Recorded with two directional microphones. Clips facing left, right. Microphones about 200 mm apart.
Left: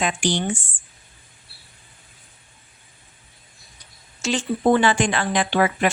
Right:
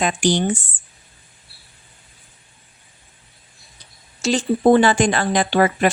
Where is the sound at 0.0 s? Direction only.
40° right (ahead or behind).